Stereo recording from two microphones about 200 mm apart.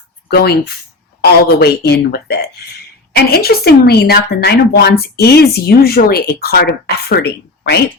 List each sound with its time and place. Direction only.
0.3 s speech: 55° left (ahead or behind)